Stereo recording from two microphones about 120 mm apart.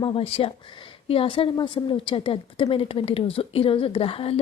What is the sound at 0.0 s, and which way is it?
A woman's voice, 50° left (ahead or behind).